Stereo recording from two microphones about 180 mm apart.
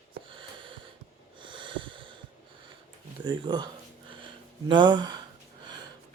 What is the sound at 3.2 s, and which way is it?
Speech, 25° right (ahead or behind).